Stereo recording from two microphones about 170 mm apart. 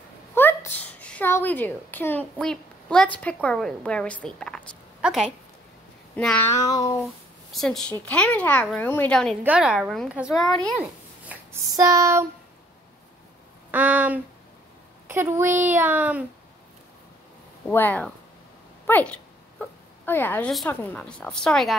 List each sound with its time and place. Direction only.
0.3 s a woman's voice: 15° left (ahead or behind); by 5.3 s 5° right (ahead or behind)
6.1 s a woman's voice: 10° left (ahead or behind)
7.5 s a woman's voice: centre (ahead or behind)
11.7 s speech: 20° right (ahead or behind)
13.7 s a sound: 10° right (ahead or behind)
15.0 s speech: 15° right (ahead or behind)
17.6 s a woman's voice: 10° left (ahead or behind)
18.9 s dog: 10° left (ahead or behind)
20.5 s a woman's voice: 10° left (ahead or behind)